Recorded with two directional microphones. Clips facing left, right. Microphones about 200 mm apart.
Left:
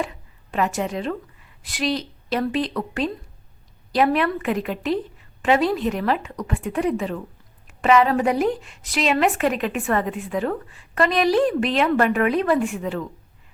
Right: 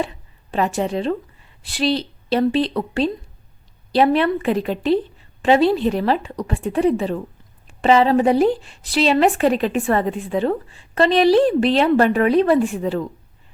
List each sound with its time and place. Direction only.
0.0 s a woman's voice: 30° right (ahead or behind)